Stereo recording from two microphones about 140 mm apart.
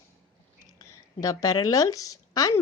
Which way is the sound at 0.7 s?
25° left (ahead or behind).